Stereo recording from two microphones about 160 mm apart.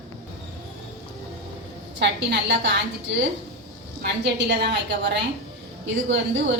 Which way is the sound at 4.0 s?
90° right.